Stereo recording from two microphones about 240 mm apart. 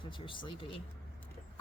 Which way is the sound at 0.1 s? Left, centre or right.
Centre.